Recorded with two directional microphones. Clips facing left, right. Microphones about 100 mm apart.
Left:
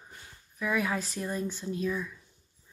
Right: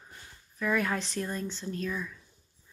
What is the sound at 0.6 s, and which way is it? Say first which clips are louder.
Speech: right 1 dB; 5° left (ahead or behind).